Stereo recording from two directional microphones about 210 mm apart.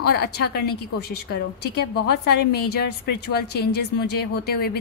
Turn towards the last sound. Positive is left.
turn(degrees=50)  # may be behind; listen again after turning